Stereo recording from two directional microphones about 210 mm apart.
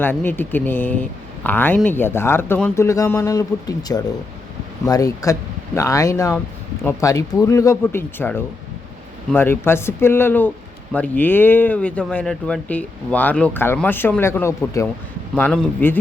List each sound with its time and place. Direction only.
0.0 s speech: 10° left (ahead or behind)